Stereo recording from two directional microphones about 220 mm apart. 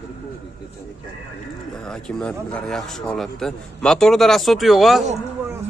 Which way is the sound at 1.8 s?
5° left (ahead or behind).